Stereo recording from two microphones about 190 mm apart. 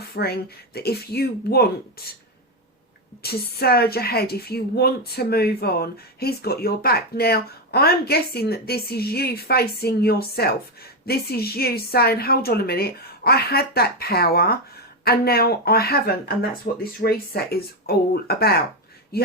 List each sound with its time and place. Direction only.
0.1 s a woman's voice: 55° left (ahead or behind)
3.2 s a woman's voice: 55° left (ahead or behind)